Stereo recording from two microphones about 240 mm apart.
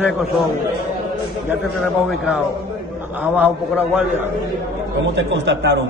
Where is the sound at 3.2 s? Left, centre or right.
Centre.